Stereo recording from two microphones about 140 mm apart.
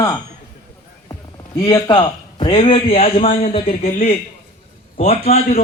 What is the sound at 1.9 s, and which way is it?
A man's voice, 35° left (ahead or behind).